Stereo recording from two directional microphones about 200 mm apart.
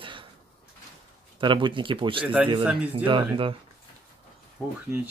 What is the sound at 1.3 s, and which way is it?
Speech, 25° right (ahead or behind).